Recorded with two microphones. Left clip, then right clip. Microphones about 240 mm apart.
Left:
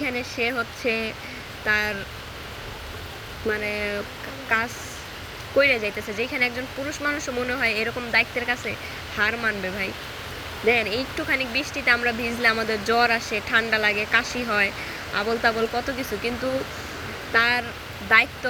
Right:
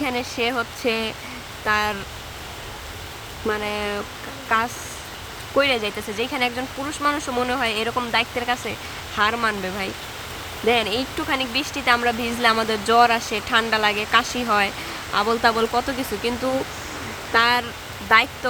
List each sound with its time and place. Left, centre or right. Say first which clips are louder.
0.0 s speech: right 2 dB; centre
3.5 s speech: right 1 dB; centre
17.3 s speech: right 2 dB; centre